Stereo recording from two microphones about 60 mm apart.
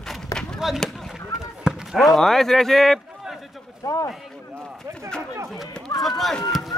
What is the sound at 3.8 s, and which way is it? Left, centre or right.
Speech, left.